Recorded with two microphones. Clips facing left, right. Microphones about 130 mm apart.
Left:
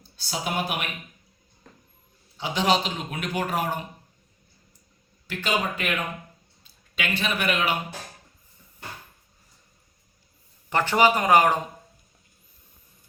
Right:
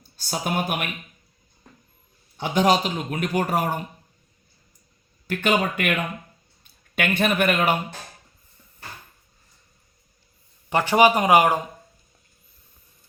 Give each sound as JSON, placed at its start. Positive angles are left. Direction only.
{"t": 0.2, "sound": "a man's voice", "side_deg": -50}
{"t": 2.4, "sound": "a man's voice", "side_deg": -45}
{"t": 5.3, "sound": "a man's voice", "side_deg": -55}
{"t": 6.9, "sound": "a man's voice", "side_deg": -55}
{"t": 10.7, "sound": "speech", "side_deg": -15}